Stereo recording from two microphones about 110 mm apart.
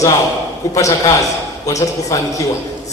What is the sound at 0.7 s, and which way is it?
A man's voice, 30° left (ahead or behind).